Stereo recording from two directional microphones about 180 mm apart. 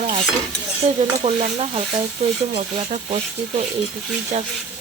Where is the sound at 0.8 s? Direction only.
35° right (ahead or behind).